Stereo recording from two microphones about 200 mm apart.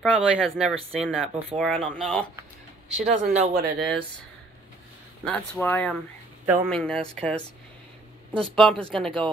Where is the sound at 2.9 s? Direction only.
35° right (ahead or behind).